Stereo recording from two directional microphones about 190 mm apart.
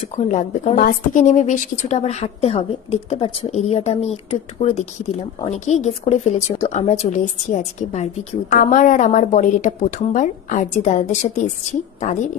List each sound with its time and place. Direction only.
0.2 s speech: 40° left (ahead or behind)